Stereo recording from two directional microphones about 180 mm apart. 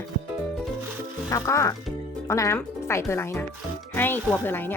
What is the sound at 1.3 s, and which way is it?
Speech, 15° left (ahead or behind).